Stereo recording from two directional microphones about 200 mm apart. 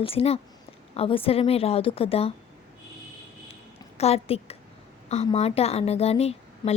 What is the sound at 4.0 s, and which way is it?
A woman's voice, 30° left (ahead or behind).